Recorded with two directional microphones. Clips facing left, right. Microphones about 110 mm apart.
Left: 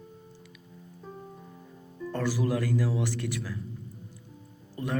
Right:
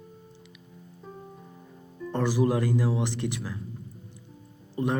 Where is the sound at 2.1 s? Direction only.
20° right (ahead or behind).